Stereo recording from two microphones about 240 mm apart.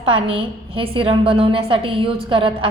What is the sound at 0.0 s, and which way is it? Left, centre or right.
A woman's voice, right.